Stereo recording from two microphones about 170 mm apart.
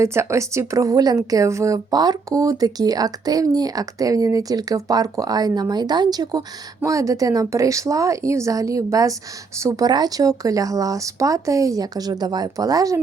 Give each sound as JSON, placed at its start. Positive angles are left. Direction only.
{"t": 0.0, "sound": "a woman's voice", "side_deg": -15}